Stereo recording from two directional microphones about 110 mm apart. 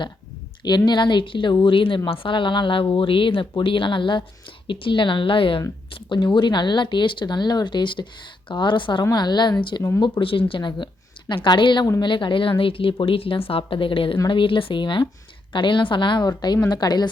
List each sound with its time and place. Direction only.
0.9 s a woman's voice: 45° left (ahead or behind)